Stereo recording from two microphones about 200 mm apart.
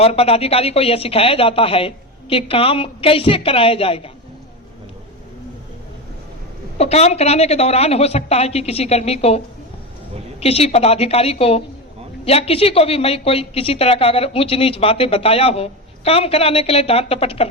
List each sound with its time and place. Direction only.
0.0 s a woman's voice: 30° left (ahead or behind)
6.7 s a woman's voice: 30° left (ahead or behind)
10.4 s a woman's voice: 30° left (ahead or behind)